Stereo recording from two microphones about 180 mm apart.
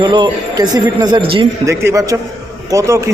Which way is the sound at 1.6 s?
15° right (ahead or behind).